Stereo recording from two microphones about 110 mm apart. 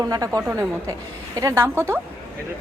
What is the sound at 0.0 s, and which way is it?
A woman's voice, 30° right (ahead or behind).